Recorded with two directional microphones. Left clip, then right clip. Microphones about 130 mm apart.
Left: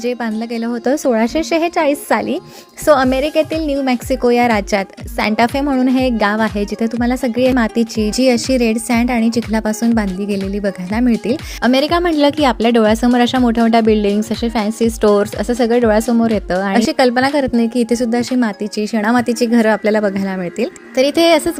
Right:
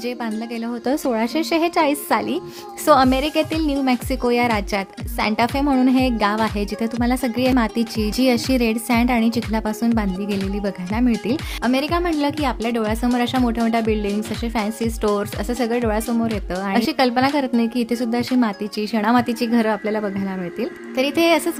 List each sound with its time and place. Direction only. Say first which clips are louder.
0.0 s a woman's voice: left 6 dB; 30° left (ahead or behind)
11.6 s speech: left 7 dB; 50° left (ahead or behind)
16.7 s a woman's voice: left 4 dB; 30° left (ahead or behind)